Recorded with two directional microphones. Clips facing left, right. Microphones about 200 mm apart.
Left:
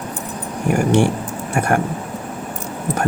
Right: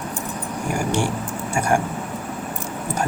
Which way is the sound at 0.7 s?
60° left (ahead or behind).